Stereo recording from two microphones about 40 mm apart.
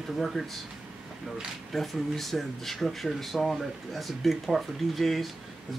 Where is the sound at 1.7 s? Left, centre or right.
Centre.